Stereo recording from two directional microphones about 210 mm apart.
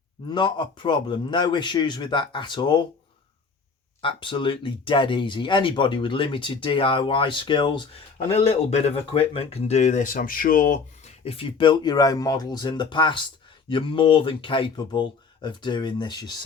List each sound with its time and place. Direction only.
0.3 s speech: 20° left (ahead or behind)
4.0 s speech: 25° left (ahead or behind)